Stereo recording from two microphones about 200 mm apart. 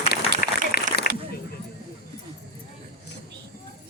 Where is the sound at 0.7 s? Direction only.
50° left (ahead or behind).